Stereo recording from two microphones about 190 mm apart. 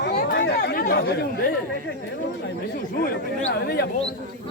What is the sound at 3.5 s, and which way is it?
Speech, 55° left (ahead or behind).